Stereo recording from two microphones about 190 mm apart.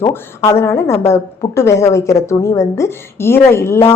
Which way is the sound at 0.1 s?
15° left (ahead or behind).